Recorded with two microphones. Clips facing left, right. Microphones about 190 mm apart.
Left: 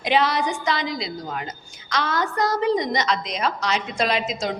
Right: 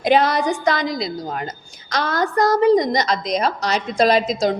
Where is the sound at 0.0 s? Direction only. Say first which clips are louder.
Right 4 dB; 45° right (ahead or behind).